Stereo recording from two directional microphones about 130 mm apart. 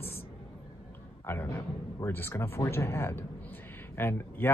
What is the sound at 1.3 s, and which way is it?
Speech, 15° left (ahead or behind).